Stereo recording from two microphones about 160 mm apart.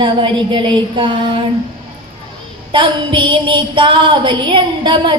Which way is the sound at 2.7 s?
30° right (ahead or behind).